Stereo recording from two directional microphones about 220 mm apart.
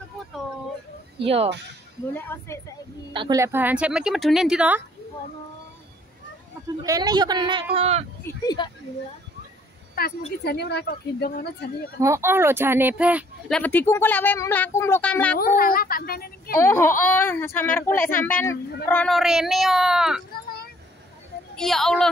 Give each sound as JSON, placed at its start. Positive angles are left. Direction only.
{"t": 1.2, "sound": "speech", "side_deg": -25}
{"t": 2.1, "sound": "speech", "side_deg": 10}
{"t": 3.1, "sound": "speech", "side_deg": -20}
{"t": 6.8, "sound": "speech", "side_deg": -20}
{"t": 8.2, "sound": "speech", "side_deg": 15}
{"t": 10.4, "sound": "a woman's voice", "side_deg": 50}
{"t": 12.0, "sound": "speech", "side_deg": -10}
{"t": 13.6, "sound": "speech", "side_deg": 10}
{"t": 15.3, "sound": "speech", "side_deg": 40}
{"t": 16.5, "sound": "speech", "side_deg": 10}
{"t": 21.5, "sound": "speech", "side_deg": 0}